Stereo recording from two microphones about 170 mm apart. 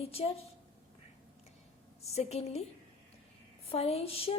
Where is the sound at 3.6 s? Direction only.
35° left (ahead or behind).